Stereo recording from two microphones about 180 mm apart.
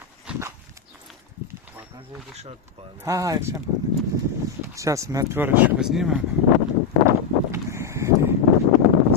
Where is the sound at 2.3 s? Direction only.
35° right (ahead or behind).